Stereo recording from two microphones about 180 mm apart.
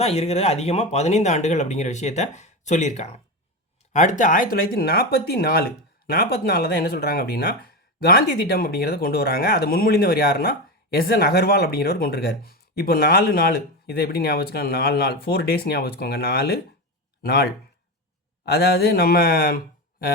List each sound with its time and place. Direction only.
0.0 s speech: 35° left (ahead or behind); by 20.1 s 55° left (ahead or behind)